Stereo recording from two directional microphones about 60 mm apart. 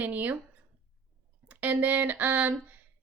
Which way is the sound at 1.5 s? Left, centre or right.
Right.